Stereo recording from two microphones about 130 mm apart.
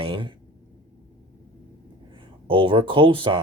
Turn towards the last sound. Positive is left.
turn(degrees=-40)  # may be behind; listen again after turning